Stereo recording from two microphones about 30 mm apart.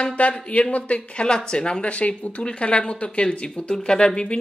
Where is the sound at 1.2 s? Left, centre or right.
Left.